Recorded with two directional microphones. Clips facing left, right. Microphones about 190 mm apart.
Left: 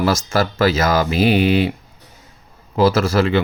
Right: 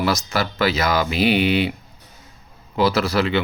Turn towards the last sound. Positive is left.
turn(degrees=45)  # may be behind; listen again after turning